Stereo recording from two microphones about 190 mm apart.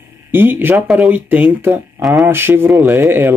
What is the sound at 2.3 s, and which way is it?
Speech, 10° right (ahead or behind).